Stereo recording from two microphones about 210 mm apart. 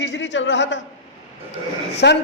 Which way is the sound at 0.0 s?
60° left (ahead or behind).